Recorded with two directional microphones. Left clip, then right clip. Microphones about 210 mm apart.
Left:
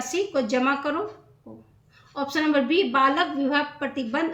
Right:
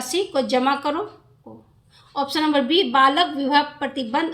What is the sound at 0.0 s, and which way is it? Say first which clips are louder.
Speech: right 3 dB; 25° right (ahead or behind).